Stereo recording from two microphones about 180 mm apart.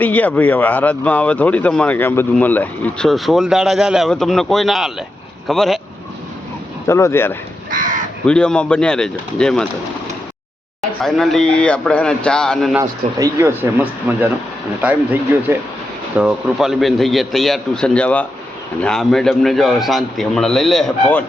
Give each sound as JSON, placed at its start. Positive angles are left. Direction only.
{"t": 0.0, "sound": "a man's voice", "side_deg": 10}
{"t": 6.8, "sound": "speech", "side_deg": 15}
{"t": 7.7, "sound": "crow", "side_deg": -45}
{"t": 8.3, "sound": "a man's voice", "side_deg": 5}
{"t": 11.0, "sound": "a man's voice", "side_deg": 0}
{"t": 12.8, "sound": "a man's voice", "side_deg": -20}